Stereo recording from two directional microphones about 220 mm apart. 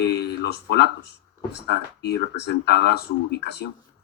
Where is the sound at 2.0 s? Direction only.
50° left (ahead or behind).